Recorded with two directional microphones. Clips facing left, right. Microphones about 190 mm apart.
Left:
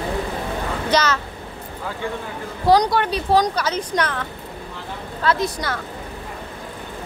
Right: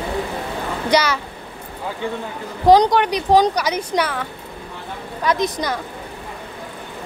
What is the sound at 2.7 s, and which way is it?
Speech, 20° right (ahead or behind).